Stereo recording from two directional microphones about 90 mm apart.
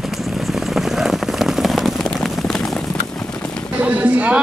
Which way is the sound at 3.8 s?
15° right (ahead or behind).